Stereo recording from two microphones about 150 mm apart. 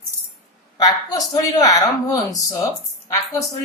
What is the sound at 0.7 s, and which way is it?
Speech, 25° left (ahead or behind).